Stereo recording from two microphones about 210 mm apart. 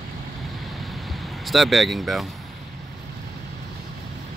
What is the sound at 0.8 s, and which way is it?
Vehicle, centre (ahead or behind).